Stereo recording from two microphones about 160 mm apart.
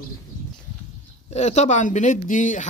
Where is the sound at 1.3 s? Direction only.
45° left (ahead or behind).